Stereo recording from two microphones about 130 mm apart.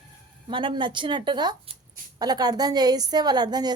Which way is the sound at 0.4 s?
40° right (ahead or behind).